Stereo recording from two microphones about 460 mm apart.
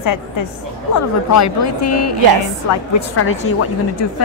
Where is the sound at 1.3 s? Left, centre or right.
Left.